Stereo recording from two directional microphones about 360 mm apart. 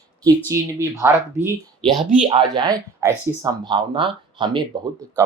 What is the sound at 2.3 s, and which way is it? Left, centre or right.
Speech, centre.